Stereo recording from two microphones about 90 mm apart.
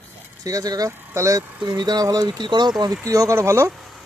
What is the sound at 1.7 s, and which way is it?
Speech, 50° right (ahead or behind).